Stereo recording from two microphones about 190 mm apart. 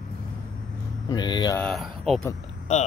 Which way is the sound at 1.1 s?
20° left (ahead or behind).